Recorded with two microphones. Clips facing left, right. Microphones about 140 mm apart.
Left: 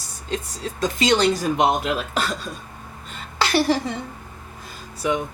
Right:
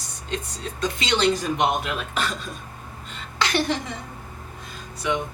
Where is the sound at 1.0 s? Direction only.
40° left (ahead or behind).